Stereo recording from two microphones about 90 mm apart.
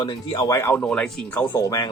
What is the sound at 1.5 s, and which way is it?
Speech, 40° left (ahead or behind).